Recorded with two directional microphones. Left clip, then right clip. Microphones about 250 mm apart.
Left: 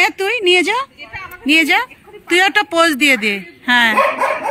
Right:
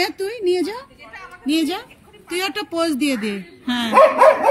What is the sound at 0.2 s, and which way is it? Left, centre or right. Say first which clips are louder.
Speech: left 7 dB; centre.